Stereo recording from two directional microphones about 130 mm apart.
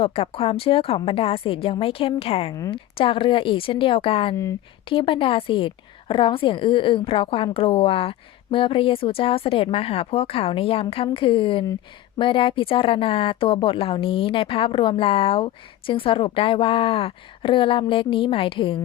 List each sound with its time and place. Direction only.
0.0 s a woman's voice: 45° left (ahead or behind)